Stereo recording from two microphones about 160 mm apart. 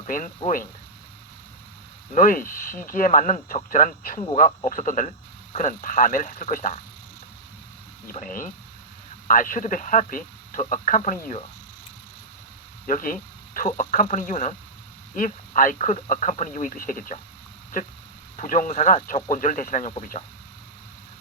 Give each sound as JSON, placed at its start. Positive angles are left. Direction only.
{"t": 0.0, "sound": "speech", "side_deg": 55}
{"t": 2.1, "sound": "speech", "side_deg": 60}
{"t": 8.1, "sound": "speech", "side_deg": 55}
{"t": 12.9, "sound": "speech", "side_deg": 60}
{"t": 18.3, "sound": "speech", "side_deg": 55}